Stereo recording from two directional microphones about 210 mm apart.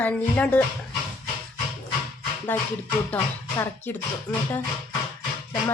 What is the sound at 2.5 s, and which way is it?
A woman's voice, 10° left (ahead or behind).